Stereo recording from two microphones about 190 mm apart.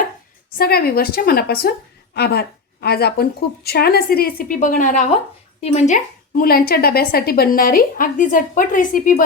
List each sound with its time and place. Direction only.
0.5 s a woman's voice: 55° left (ahead or behind)